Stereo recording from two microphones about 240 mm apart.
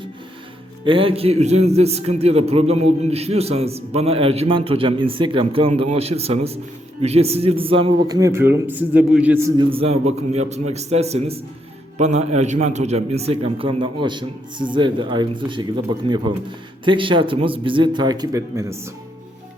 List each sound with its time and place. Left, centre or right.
0.9 s a man's voice: right